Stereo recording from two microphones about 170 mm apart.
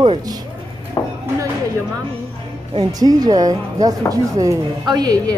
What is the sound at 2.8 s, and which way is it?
Speech, 20° right (ahead or behind).